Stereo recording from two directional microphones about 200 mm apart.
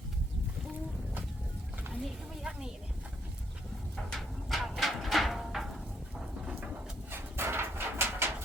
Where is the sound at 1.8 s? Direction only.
5° right (ahead or behind).